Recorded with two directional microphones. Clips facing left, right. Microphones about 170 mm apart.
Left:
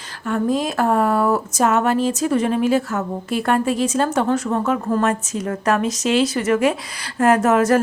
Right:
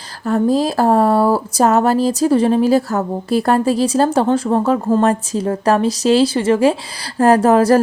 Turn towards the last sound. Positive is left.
turn(degrees=-35)  # may be behind; listen again after turning